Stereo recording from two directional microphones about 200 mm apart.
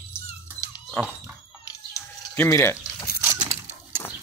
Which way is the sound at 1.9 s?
15° left (ahead or behind).